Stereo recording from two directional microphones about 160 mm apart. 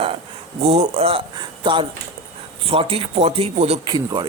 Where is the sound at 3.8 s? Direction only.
30° right (ahead or behind).